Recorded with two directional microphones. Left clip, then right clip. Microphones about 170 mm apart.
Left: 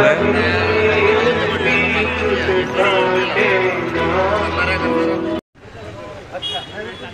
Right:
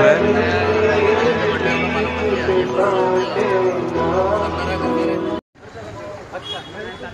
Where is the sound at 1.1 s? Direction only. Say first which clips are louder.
Left 1 dB; 25° right (ahead or behind).